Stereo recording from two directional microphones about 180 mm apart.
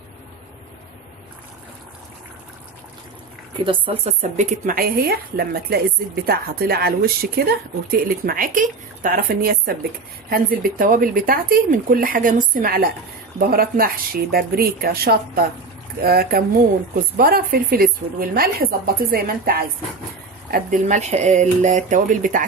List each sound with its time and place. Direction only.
3.6 s speech: 30° right (ahead or behind); by 22.4 s 45° right (ahead or behind)